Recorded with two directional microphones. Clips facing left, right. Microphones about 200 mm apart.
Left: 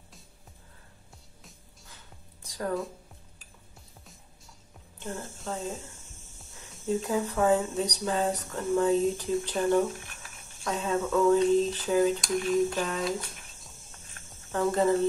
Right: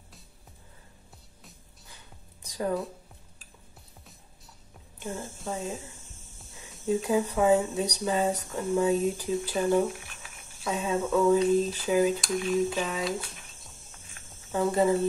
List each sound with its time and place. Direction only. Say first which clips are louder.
2.4 s music: right 3 dB; 15° right (ahead or behind)
4.9 s music: right 1 dB; 15° right (ahead or behind)
5.4 s speech: right 1 dB; 10° right (ahead or behind)
14.5 s speech: right 1 dB; 10° right (ahead or behind)